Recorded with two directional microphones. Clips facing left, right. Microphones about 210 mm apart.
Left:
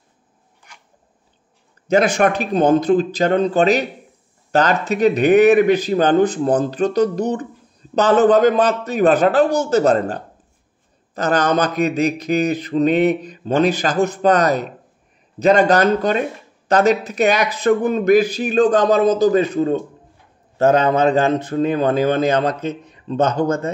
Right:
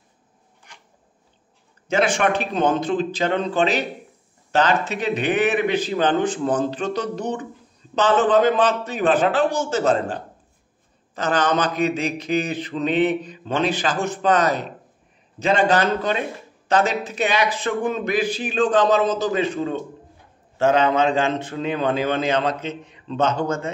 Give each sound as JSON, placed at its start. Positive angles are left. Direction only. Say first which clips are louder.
{"t": 1.9, "sound": "mantra", "louder": "left 4 dB", "side_deg": 40}
{"t": 11.1, "sound": "mantra", "louder": "left 4 dB", "side_deg": 40}